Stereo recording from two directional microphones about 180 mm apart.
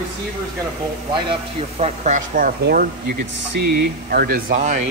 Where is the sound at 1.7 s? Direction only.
40° right (ahead or behind).